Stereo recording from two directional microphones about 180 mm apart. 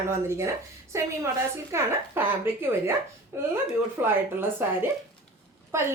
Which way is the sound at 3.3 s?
15° right (ahead or behind).